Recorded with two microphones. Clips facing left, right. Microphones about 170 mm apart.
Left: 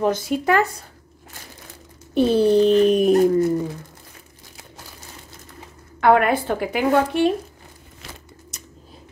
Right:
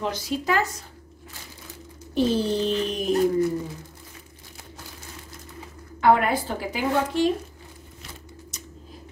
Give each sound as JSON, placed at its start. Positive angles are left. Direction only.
{"t": 0.0, "sound": "speech", "side_deg": 50}
{"t": 2.1, "sound": "speech", "side_deg": 60}
{"t": 5.9, "sound": "speech", "side_deg": 65}